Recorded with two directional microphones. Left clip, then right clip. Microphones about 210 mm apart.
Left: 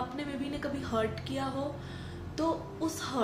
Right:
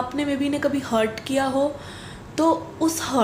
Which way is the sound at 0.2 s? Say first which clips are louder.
Right 13 dB; 35° right (ahead or behind).